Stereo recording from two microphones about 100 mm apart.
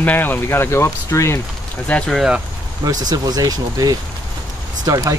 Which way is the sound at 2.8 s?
40° right (ahead or behind).